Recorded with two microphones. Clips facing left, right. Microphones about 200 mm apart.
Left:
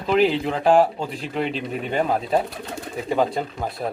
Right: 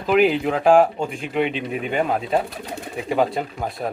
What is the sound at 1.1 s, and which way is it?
Speech, 35° left (ahead or behind).